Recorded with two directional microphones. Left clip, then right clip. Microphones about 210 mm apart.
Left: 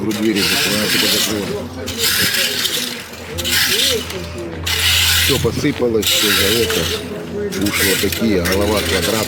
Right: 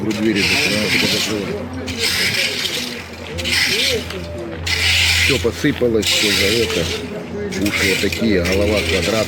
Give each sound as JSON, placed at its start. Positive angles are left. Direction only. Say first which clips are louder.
{"t": 0.1, "sound": "speech", "louder": "even", "side_deg": 45}
{"t": 4.7, "sound": "rub", "louder": "left 1 dB", "side_deg": 40}
{"t": 5.4, "sound": "speech", "louder": "even", "side_deg": 10}
{"t": 6.0, "sound": "speech", "louder": "left 3 dB", "side_deg": 40}
{"t": 8.2, "sound": "speech", "louder": "even", "side_deg": 15}
{"t": 8.6, "sound": "speech", "louder": "even", "side_deg": 40}